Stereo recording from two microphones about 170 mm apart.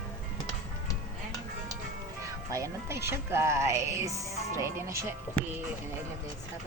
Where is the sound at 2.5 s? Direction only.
15° right (ahead or behind).